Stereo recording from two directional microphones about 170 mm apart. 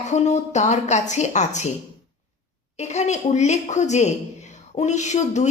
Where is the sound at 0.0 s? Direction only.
45° left (ahead or behind).